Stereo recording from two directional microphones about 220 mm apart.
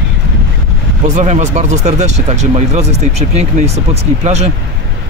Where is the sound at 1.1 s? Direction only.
35° right (ahead or behind).